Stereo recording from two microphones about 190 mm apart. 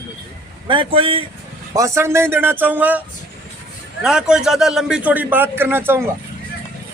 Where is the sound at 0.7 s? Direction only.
25° right (ahead or behind).